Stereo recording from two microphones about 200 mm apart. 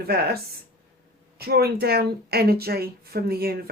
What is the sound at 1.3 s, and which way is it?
Speech, 50° right (ahead or behind).